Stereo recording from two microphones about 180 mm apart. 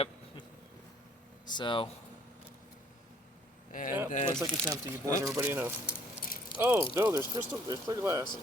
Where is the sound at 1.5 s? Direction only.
25° left (ahead or behind).